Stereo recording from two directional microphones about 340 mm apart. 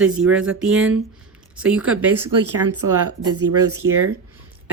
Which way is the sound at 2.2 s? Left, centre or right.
Right.